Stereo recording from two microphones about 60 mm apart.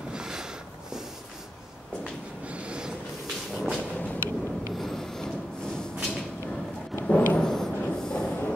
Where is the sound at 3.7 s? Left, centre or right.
Left.